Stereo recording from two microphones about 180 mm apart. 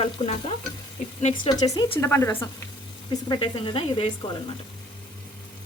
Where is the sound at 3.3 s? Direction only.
30° left (ahead or behind).